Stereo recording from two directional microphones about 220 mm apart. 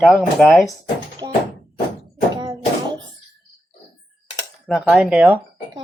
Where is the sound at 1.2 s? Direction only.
10° right (ahead or behind).